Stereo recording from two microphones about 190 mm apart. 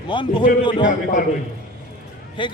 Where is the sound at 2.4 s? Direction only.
25° left (ahead or behind).